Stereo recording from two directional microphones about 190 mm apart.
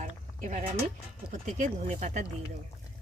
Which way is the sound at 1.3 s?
40° right (ahead or behind).